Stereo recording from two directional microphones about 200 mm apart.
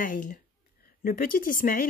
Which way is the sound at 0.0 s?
40° left (ahead or behind).